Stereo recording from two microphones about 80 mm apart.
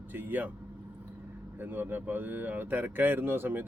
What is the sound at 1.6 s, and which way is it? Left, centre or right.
Speech, right.